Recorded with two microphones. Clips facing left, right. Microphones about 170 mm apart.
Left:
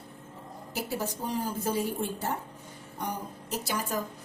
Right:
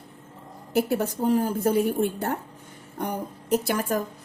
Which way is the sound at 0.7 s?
60° right (ahead or behind).